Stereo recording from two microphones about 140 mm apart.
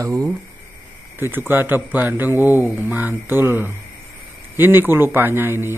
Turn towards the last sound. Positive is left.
turn(degrees=-15)  # may be behind; listen again after turning